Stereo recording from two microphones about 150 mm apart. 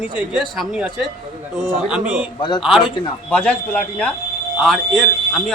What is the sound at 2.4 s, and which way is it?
Speech, 30° left (ahead or behind).